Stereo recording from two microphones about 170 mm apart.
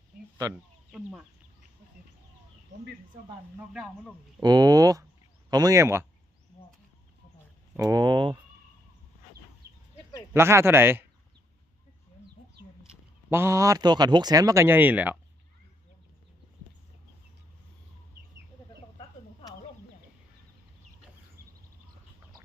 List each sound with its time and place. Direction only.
0.9 s speech: centre (ahead or behind)
3.6 s speech: 5° right (ahead or behind)
4.4 s speech: 25° right (ahead or behind)
7.8 s speech: 20° right (ahead or behind)
10.3 s speech: 15° right (ahead or behind)
13.3 s speech: 15° right (ahead or behind)
18.9 s a sound: 25° left (ahead or behind)